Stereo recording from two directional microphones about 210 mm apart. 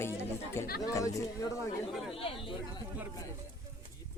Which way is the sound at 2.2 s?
25° left (ahead or behind).